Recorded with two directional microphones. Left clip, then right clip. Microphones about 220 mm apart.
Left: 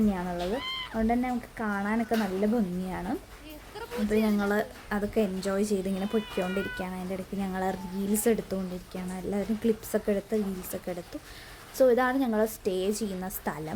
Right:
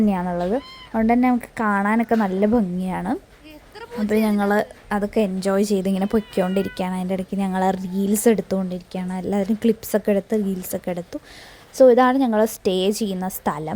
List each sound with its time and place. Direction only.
0.1 s a woman's voice: 35° right (ahead or behind)